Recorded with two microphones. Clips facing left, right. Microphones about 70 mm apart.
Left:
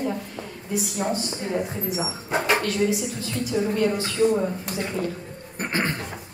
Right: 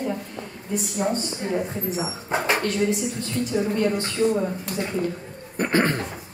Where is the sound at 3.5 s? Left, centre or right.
Centre.